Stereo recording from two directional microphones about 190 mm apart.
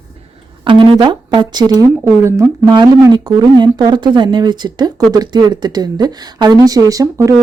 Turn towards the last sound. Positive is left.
turn(degrees=-15)  # may be behind; listen again after turning